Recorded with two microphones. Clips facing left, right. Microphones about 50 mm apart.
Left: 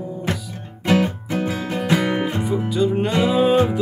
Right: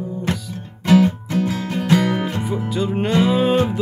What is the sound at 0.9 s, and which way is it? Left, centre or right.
Music, centre.